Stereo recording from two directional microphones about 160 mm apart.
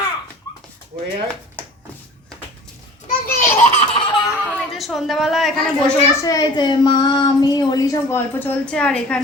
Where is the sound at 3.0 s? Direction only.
50° left (ahead or behind).